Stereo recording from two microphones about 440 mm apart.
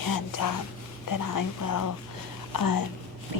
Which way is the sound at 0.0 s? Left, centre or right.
Left.